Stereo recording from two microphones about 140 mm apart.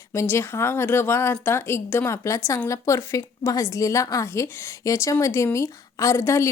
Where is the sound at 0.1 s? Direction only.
20° left (ahead or behind).